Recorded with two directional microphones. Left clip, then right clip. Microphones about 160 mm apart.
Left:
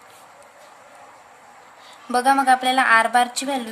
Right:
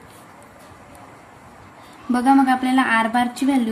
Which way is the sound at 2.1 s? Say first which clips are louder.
Left 1 dB; 35° left (ahead or behind).